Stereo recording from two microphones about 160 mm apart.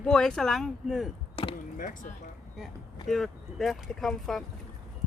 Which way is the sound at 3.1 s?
Centre (ahead or behind).